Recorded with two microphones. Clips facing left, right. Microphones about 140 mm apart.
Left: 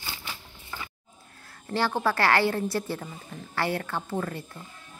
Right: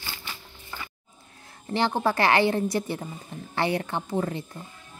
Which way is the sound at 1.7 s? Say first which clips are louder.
Right 2 dB; 20° right (ahead or behind).